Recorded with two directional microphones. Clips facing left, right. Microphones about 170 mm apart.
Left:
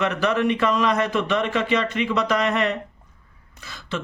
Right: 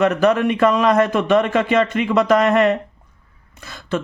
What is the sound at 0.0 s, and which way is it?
Speech, 45° right (ahead or behind).